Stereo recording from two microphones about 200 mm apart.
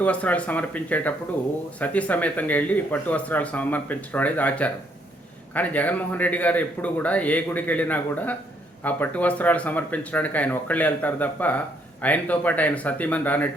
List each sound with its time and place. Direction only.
0.0 s speech: 5° left (ahead or behind)